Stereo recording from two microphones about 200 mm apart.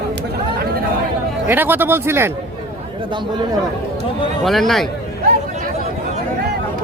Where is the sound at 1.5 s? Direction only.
10° right (ahead or behind).